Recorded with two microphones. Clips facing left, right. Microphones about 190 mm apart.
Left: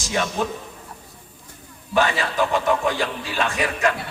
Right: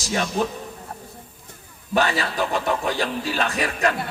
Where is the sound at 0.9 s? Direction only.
60° right (ahead or behind).